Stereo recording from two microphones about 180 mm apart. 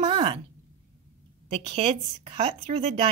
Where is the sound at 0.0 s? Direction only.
30° right (ahead or behind).